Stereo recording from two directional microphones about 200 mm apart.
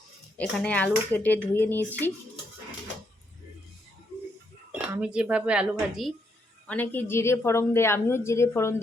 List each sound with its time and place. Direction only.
0.3 s a woman's voice: 5° left (ahead or behind)
4.9 s speech: 5° right (ahead or behind)
6.7 s a woman's voice: 10° left (ahead or behind)